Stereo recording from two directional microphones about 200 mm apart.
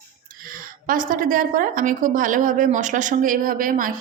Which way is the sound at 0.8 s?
40° right (ahead or behind).